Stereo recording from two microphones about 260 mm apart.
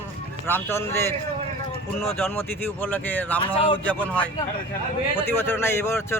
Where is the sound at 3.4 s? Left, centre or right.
Left.